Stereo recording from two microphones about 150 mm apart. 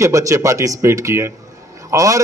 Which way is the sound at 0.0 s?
20° right (ahead or behind).